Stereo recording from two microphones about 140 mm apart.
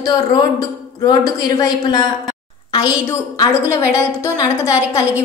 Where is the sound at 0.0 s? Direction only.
30° left (ahead or behind).